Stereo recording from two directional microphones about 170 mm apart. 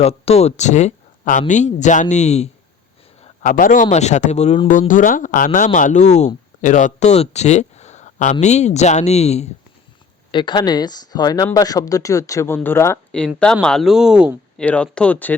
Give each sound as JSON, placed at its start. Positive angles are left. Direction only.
{"t": 0.0, "sound": "speech", "side_deg": 35}
{"t": 3.2, "sound": "speech", "side_deg": 50}
{"t": 4.7, "sound": "speech", "side_deg": 50}
{"t": 10.3, "sound": "speech", "side_deg": 25}
{"t": 14.6, "sound": "speech", "side_deg": 5}